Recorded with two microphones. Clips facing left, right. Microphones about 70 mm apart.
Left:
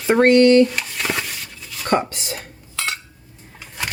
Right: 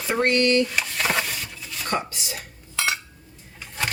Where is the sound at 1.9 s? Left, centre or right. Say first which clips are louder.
Left 8 dB; left.